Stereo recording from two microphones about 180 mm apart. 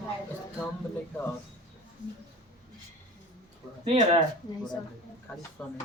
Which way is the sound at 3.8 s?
35° right (ahead or behind).